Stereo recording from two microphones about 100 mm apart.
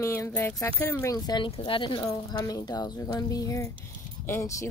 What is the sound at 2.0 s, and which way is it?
Speech, 40° left (ahead or behind).